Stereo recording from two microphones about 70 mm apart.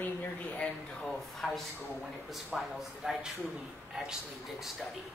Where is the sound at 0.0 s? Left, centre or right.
Left.